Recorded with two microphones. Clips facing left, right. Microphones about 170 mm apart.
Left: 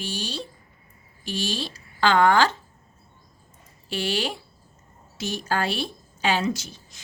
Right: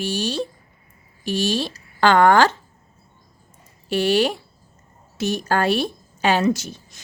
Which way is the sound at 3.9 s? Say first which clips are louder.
Right 9 dB; 60° right (ahead or behind).